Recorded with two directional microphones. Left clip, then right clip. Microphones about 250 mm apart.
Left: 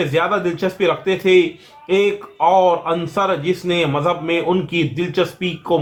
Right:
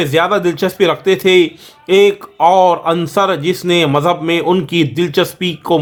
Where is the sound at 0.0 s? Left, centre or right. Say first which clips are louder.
Right 5 dB; right.